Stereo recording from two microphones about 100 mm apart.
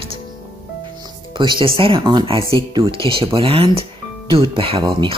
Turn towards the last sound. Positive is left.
turn(degrees=-60)  # may be behind; listen again after turning